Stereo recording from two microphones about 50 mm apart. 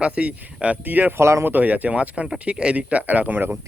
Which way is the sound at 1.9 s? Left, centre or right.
Right.